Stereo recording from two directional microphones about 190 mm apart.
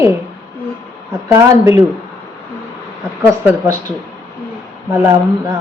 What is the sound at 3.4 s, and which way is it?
Speech, 10° right (ahead or behind).